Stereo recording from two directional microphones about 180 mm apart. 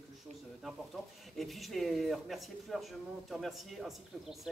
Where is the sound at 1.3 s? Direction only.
Centre (ahead or behind).